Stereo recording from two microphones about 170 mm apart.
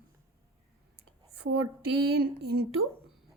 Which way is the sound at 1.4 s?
75° right (ahead or behind).